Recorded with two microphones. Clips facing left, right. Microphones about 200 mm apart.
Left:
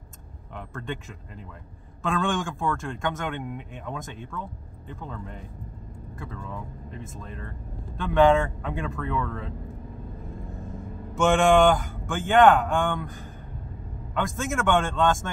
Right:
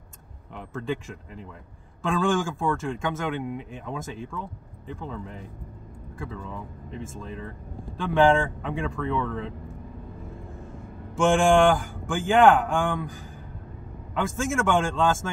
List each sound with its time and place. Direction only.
0.7 s speech: centre (ahead or behind)
6.9 s speech: centre (ahead or behind)
11.1 s speech: centre (ahead or behind)
14.1 s speech: centre (ahead or behind)